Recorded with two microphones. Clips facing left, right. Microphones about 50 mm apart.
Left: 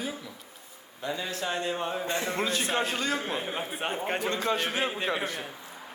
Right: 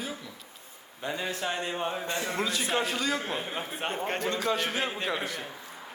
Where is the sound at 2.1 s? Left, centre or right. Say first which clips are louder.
Left 1 dB; left.